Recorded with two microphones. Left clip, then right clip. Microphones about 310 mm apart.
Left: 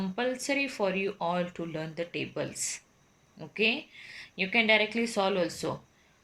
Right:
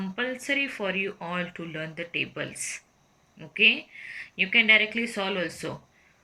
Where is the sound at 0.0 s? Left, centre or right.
Centre.